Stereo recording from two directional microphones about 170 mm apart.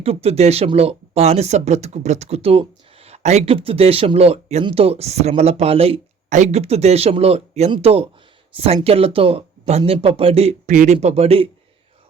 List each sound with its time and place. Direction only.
0.0 s speech: 35° right (ahead or behind)